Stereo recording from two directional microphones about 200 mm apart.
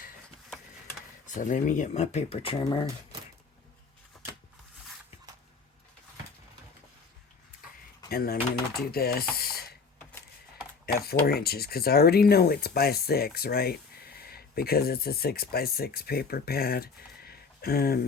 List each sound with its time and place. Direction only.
1.3 s speech: 40° left (ahead or behind)
4.1 s shuffling cards: centre (ahead or behind)
8.1 s speech: 50° left (ahead or behind)
9.3 s a sound: 50° left (ahead or behind)
10.9 s speech: 50° left (ahead or behind)